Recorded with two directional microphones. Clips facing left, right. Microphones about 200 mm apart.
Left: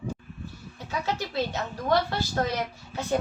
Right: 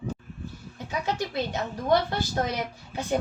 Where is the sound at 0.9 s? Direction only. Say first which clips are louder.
Right 1 dB; 15° right (ahead or behind).